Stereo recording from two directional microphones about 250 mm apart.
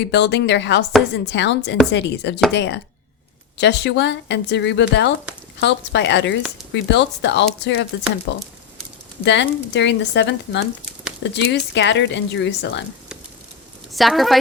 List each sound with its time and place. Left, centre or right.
0.1 s speech: left
13.9 s a woman's voice: centre